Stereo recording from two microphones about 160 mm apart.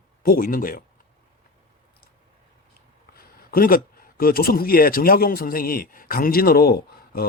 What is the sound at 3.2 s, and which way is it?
A man's voice, 65° left (ahead or behind).